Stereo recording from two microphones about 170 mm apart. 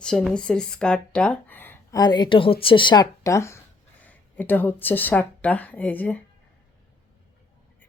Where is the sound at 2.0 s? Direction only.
25° left (ahead or behind); by 6.1 s 10° left (ahead or behind).